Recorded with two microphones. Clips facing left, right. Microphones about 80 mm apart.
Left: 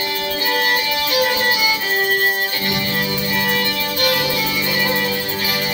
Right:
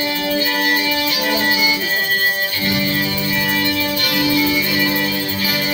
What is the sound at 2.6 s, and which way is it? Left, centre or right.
Music, left.